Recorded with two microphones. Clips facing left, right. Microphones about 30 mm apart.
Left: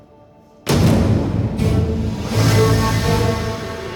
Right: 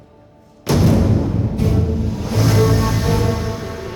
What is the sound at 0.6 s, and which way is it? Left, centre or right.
Music, centre.